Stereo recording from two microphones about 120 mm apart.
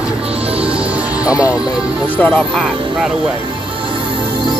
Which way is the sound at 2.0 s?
15° left (ahead or behind).